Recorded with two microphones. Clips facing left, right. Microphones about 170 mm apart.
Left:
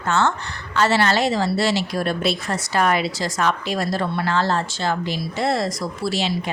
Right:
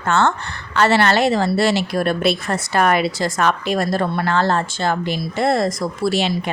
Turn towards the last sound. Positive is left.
turn(degrees=-55)  # may be behind; listen again after turning